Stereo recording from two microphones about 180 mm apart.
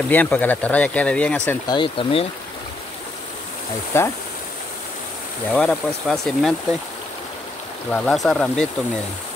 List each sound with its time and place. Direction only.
0.1 s speech: 10° left (ahead or behind)
1.7 s speech: 30° left (ahead or behind)
3.9 s speech: 15° left (ahead or behind)
5.5 s speech: 5° left (ahead or behind)
7.9 s speech: 5° left (ahead or behind)